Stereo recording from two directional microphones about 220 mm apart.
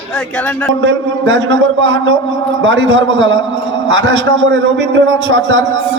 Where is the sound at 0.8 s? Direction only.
60° right (ahead or behind).